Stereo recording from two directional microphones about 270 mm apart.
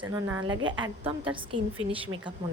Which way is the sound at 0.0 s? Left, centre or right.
Centre.